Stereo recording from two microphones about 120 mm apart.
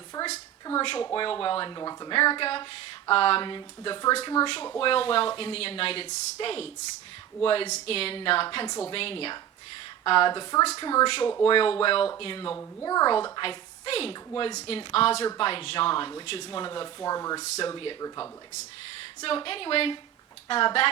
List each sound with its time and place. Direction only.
0.2 s a sound: 30° left (ahead or behind)
0.8 s speech: 45° left (ahead or behind)
4.4 s speech: 10° left (ahead or behind)
4.8 s speech: 50° left (ahead or behind)
12.8 s speech: 30° left (ahead or behind)
17.7 s speech: 45° left (ahead or behind)
19.2 s speech: 50° left (ahead or behind)